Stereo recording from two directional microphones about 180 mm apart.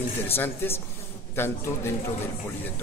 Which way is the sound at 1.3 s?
15° left (ahead or behind).